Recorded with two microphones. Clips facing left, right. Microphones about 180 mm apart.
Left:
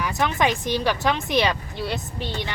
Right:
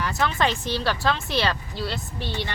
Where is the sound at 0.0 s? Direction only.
15° left (ahead or behind).